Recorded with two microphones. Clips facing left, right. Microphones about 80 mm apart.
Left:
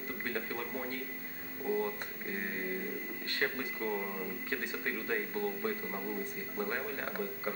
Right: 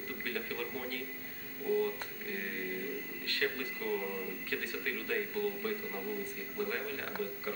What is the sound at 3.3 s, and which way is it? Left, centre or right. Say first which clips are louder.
Speech: even; left.